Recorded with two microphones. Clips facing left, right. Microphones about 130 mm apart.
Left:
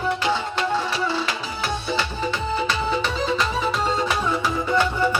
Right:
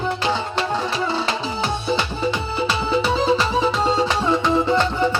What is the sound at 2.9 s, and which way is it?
Music, 30° right (ahead or behind).